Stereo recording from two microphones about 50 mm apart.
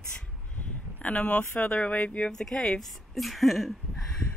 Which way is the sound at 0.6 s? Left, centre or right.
Left.